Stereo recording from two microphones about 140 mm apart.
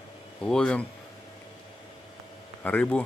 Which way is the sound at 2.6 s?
10° left (ahead or behind).